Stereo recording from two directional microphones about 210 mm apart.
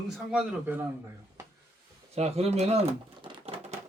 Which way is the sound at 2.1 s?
30° right (ahead or behind).